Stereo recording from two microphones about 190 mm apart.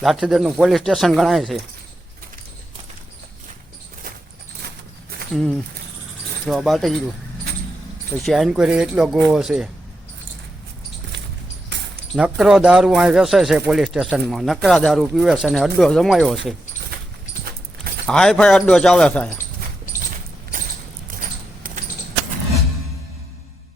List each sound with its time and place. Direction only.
0.0 s speech: centre (ahead or behind)
5.3 s speech: centre (ahead or behind)
8.2 s speech: centre (ahead or behind)
12.1 s speech: 5° right (ahead or behind)
18.1 s speech: 5° left (ahead or behind)
21.1 s rodents: 45° right (ahead or behind)